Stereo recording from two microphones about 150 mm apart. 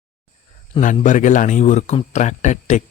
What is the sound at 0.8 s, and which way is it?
A man's voice, 55° left (ahead or behind).